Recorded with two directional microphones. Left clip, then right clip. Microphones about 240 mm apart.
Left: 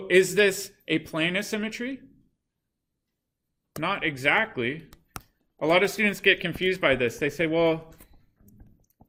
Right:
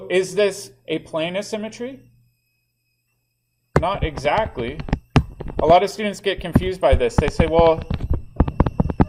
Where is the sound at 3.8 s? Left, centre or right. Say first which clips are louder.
Right 1 dB; centre.